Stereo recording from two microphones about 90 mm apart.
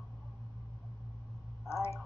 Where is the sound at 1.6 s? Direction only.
30° left (ahead or behind).